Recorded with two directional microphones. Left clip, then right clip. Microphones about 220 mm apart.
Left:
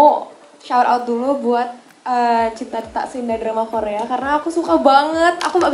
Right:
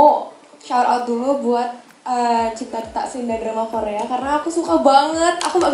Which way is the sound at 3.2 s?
15° left (ahead or behind).